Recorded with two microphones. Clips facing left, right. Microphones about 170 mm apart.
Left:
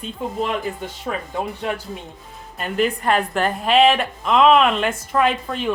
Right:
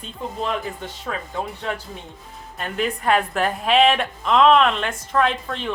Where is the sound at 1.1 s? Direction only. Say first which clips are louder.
Left 3 dB; 10° left (ahead or behind).